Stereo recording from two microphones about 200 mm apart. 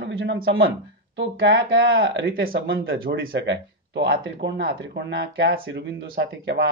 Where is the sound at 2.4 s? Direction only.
50° right (ahead or behind).